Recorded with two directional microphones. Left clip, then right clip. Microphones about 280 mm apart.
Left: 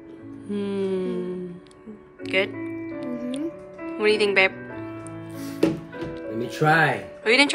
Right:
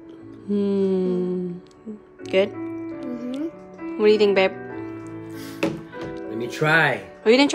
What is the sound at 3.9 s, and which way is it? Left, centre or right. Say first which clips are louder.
Speech: right 3 dB; centre.